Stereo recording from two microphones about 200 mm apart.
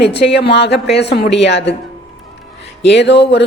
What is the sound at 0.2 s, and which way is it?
A woman's voice, 55° left (ahead or behind).